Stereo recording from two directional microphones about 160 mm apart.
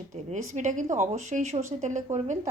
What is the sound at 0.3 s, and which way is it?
A woman's voice, 50° right (ahead or behind).